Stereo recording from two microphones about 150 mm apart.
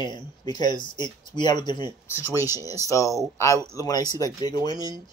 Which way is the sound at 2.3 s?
15° right (ahead or behind).